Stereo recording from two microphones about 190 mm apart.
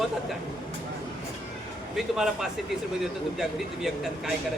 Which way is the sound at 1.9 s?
Centre (ahead or behind).